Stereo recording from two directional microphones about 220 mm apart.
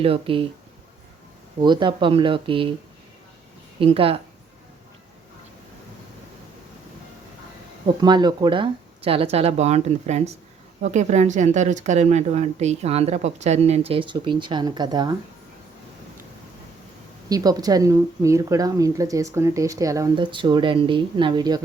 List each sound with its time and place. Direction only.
0.0 s speech: 25° right (ahead or behind)
1.6 s speech: 20° right (ahead or behind)
3.8 s speech: 25° right (ahead or behind)
8.0 s speech: 20° right (ahead or behind)
17.2 s speech: 15° right (ahead or behind)